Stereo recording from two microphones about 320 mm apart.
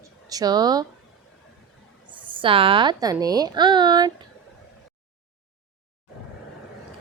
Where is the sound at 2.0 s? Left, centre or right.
Centre.